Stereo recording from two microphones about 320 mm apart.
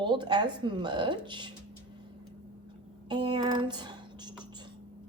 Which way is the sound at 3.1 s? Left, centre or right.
Centre.